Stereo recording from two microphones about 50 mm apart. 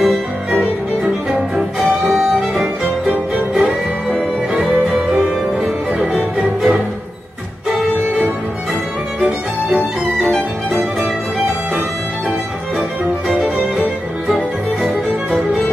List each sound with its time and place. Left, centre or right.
0.0 s music: centre
2.0 s music: centre
2.6 s music: centre
9.2 s music: centre
14.2 s music: centre